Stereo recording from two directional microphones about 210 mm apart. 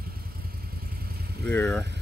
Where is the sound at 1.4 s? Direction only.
5° left (ahead or behind).